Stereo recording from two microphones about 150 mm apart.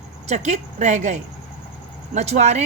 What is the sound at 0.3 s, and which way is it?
A woman's voice, 50° right (ahead or behind).